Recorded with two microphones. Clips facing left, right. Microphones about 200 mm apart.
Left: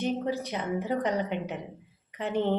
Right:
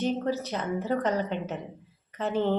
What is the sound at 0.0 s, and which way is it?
A woman's voice, 15° left (ahead or behind).